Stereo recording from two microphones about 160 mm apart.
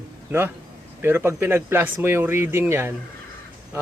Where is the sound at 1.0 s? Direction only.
15° right (ahead or behind).